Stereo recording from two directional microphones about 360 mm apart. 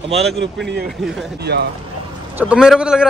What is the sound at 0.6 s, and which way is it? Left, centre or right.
Speech, right.